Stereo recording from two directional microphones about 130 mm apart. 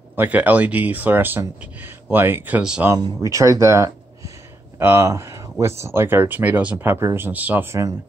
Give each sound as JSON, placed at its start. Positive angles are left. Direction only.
{"t": 0.1, "sound": "speech", "side_deg": -15}
{"t": 3.0, "sound": "speech", "side_deg": -30}